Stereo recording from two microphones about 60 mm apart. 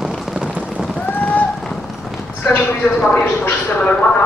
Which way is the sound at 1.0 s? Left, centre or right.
Left.